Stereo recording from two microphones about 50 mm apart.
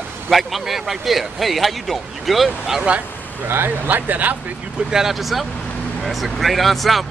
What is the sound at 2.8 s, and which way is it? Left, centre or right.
Speech, right.